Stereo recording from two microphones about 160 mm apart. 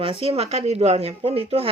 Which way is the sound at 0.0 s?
35° right (ahead or behind).